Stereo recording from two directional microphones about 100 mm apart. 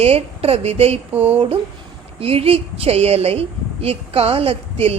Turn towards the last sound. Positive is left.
turn(degrees=-75)  # may be behind; listen again after turning